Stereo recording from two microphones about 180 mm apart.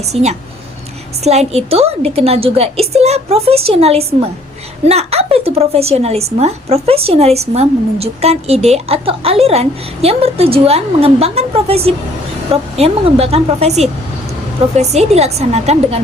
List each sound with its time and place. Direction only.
0.0 s a woman's voice: 35° right (ahead or behind)